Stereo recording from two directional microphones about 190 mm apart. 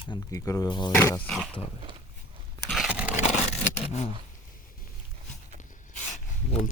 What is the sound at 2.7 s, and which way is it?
Scrape, 5° right (ahead or behind).